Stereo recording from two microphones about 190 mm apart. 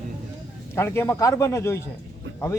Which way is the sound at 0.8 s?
15° left (ahead or behind).